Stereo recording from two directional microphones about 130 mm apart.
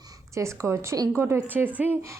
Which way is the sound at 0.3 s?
20° right (ahead or behind).